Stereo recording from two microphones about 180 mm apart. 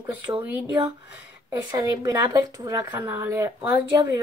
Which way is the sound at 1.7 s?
20° right (ahead or behind).